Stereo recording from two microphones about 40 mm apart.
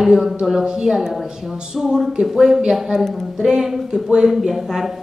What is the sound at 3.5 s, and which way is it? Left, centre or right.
Speech, centre.